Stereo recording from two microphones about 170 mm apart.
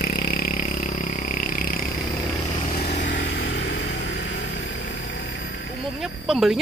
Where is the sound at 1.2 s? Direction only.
55° left (ahead or behind).